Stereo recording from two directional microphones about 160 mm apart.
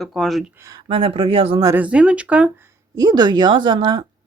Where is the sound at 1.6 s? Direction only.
20° right (ahead or behind).